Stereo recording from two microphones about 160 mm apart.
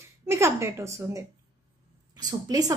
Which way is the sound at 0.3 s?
15° right (ahead or behind).